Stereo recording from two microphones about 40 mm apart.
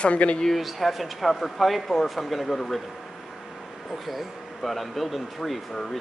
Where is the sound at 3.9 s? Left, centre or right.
Centre.